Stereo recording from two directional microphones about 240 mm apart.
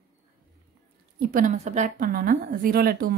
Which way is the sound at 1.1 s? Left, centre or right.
Right.